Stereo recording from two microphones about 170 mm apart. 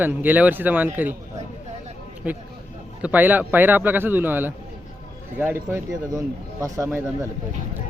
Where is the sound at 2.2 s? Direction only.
10° right (ahead or behind).